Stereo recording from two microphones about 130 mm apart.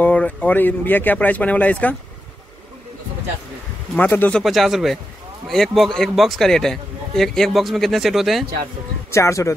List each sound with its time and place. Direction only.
0.0 s speech: 10° left (ahead or behind)
3.9 s speech: 15° left (ahead or behind)
4.4 s a man's voice: centre (ahead or behind)
9.1 s speech: 25° left (ahead or behind)